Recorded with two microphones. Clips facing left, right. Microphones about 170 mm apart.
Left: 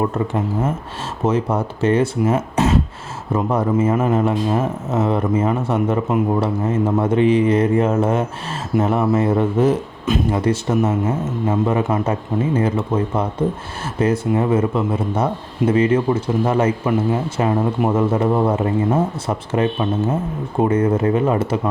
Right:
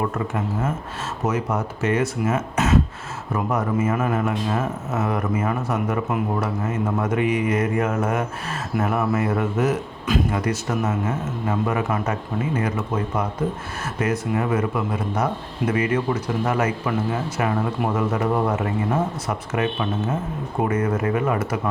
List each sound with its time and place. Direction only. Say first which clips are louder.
0.1 s a man's voice: left 4 dB; 30° left (ahead or behind)